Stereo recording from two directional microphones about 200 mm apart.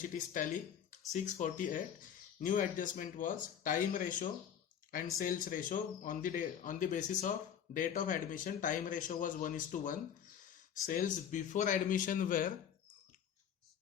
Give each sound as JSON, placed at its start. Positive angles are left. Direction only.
{"t": 0.0, "sound": "speech", "side_deg": 40}